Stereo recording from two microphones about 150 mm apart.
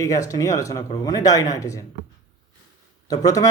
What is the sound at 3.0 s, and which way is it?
Speech, 25° left (ahead or behind).